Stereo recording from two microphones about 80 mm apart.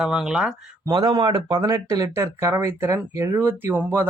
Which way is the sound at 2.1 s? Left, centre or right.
Right.